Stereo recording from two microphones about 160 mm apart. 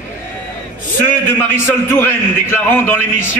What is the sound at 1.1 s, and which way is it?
A man's voice, 15° left (ahead or behind).